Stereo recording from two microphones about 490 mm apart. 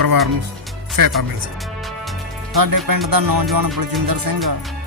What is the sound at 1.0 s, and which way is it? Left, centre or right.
Speech, right.